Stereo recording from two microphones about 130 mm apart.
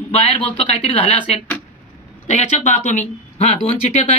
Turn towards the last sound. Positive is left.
turn(degrees=55)  # may be behind; listen again after turning